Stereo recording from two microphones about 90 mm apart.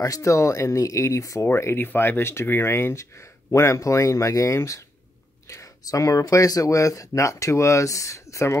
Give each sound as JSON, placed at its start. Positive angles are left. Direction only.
{"t": 0.0, "sound": "speech", "side_deg": 35}